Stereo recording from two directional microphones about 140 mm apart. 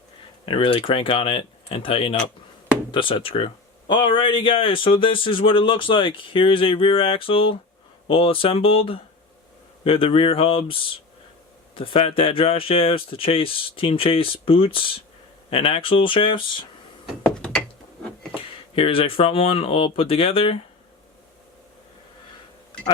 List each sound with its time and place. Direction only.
0.4 s speech: 35° left (ahead or behind)
17.2 s a sound: 5° left (ahead or behind)
18.3 s speech: 40° left (ahead or behind)